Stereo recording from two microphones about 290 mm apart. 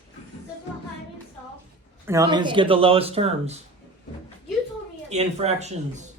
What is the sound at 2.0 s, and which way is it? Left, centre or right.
A man's voice, centre.